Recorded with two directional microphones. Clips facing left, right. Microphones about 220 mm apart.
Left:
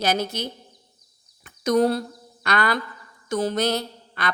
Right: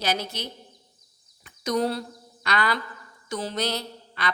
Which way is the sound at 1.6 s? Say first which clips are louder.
Left 6 dB; 50° left (ahead or behind).